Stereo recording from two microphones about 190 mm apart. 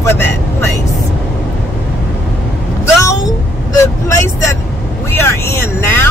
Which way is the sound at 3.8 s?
15° left (ahead or behind).